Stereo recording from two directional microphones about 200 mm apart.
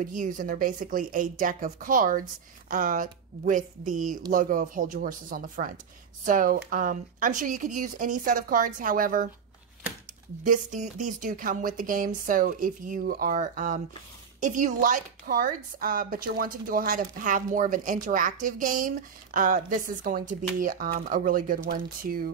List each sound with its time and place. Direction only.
0.0 s speech: 40° right (ahead or behind)
10.4 s a woman's voice: 40° right (ahead or behind)